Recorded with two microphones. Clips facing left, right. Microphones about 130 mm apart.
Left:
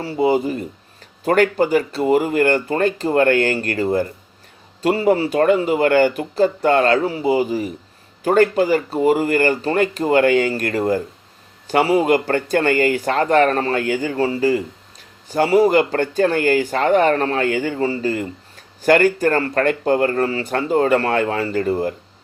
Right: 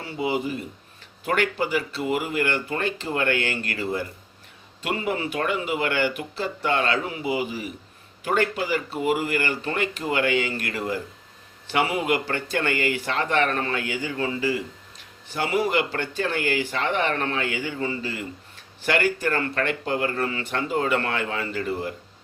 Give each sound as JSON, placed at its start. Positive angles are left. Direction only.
{"t": 0.0, "sound": "speech", "side_deg": 35}